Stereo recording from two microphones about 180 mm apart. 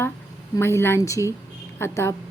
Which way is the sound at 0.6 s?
15° left (ahead or behind).